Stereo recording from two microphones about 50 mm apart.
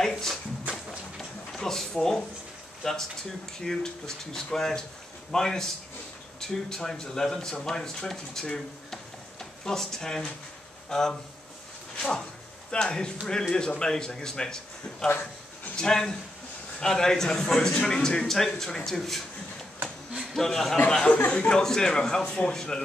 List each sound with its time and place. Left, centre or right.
0.0 s speech: centre
1.1 s a sound: centre
2.8 s speech: centre
12.7 s speech: centre
20.3 s speech: centre